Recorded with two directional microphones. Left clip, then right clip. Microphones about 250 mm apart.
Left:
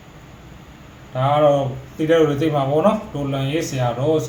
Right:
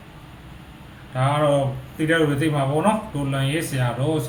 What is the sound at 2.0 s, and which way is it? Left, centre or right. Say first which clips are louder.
Speech: left 4 dB; centre.